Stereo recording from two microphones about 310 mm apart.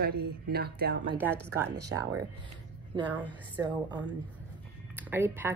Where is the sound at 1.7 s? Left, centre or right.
Right.